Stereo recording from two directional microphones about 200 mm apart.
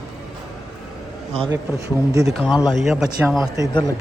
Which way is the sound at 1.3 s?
30° right (ahead or behind).